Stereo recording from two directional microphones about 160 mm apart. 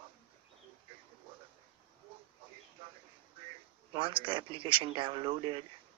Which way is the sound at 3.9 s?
30° right (ahead or behind).